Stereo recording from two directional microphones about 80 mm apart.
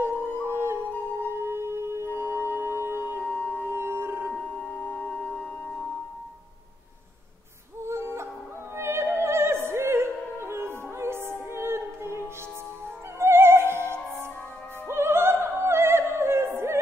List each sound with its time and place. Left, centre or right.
0.5 s music: right
3.3 s music: left
3.6 s music: right
4.3 s singing bowl: centre
7.8 s music: right
8.7 s opera: right
11.5 s music: right
14.9 s opera: right